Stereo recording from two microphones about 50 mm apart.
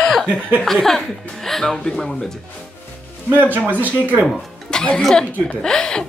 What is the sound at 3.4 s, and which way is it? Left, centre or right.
Speech, right.